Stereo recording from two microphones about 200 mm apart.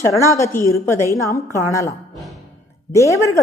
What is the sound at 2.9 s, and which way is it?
Speech, 15° left (ahead or behind).